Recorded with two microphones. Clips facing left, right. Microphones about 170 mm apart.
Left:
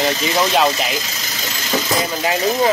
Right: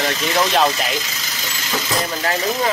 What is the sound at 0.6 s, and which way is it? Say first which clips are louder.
Speech: left 1 dB; centre (ahead or behind).